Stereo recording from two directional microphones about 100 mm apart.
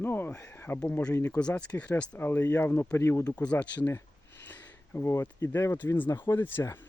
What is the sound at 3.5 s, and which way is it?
Speech, 15° left (ahead or behind).